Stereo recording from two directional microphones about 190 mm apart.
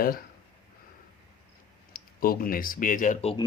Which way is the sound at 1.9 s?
50° left (ahead or behind).